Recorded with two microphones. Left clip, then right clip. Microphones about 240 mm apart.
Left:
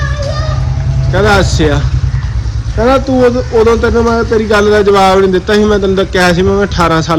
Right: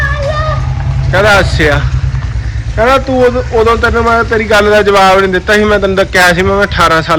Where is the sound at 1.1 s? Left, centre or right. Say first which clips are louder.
Right 2 dB; centre.